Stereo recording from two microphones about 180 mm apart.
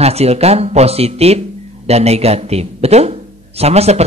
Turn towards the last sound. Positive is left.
turn(degrees=-35)  # may be behind; listen again after turning